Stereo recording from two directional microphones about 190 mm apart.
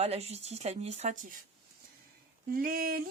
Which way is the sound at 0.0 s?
35° right (ahead or behind).